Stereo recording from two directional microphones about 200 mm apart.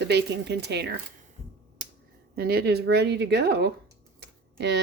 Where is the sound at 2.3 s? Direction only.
50° right (ahead or behind).